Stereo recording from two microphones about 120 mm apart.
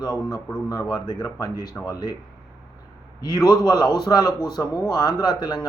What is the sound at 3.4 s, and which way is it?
A man's voice, 35° left (ahead or behind).